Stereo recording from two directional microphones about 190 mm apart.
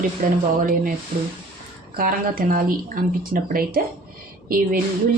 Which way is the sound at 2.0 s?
50° right (ahead or behind).